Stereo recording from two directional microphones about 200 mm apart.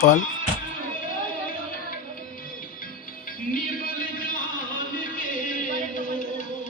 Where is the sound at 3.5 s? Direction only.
45° left (ahead or behind).